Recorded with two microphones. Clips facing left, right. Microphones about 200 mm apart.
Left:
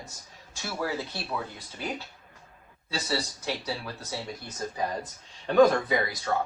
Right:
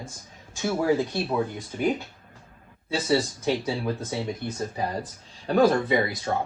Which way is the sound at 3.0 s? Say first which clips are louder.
Right 7 dB; 25° right (ahead or behind).